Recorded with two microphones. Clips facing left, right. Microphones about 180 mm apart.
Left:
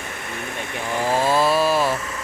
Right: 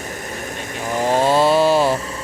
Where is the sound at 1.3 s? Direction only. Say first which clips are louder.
Right 4 dB; 25° right (ahead or behind).